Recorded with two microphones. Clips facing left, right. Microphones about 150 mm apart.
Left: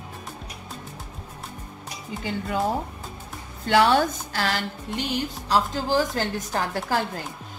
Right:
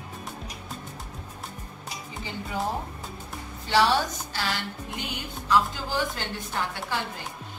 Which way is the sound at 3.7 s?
50° left (ahead or behind).